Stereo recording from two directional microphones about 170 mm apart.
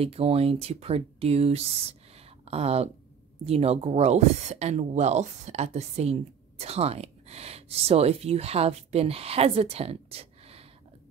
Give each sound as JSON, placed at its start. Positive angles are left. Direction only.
{"t": 0.0, "sound": "speech", "side_deg": -35}
{"t": 2.1, "sound": "a sound", "side_deg": -35}
{"t": 3.4, "sound": "speech", "side_deg": -35}